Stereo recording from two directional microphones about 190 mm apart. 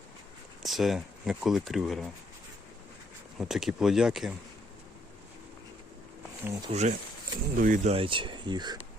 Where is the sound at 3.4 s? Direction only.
Centre (ahead or behind).